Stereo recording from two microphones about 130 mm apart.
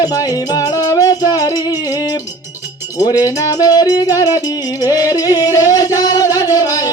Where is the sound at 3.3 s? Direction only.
30° left (ahead or behind).